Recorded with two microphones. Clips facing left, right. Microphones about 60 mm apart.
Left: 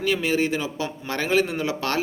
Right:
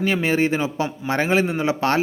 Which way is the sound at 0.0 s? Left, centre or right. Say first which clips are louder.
Right 3 dB; right.